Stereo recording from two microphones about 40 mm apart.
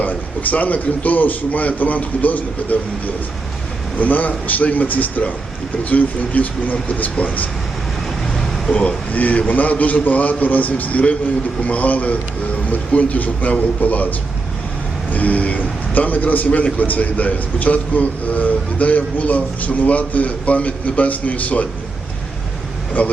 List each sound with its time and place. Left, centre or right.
0.0 s a man's voice: left
3.9 s a man's voice: left
8.7 s speech: left
9.1 s a man's voice: left
23.0 s a man's voice: left